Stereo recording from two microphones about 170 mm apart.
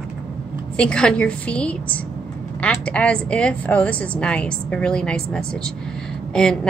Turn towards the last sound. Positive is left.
turn(degrees=5)  # may be behind; listen again after turning